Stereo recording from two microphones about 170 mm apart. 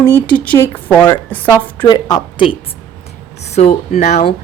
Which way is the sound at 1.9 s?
25° left (ahead or behind).